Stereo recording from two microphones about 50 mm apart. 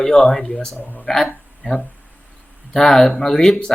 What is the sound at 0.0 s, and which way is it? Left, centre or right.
Speech, centre.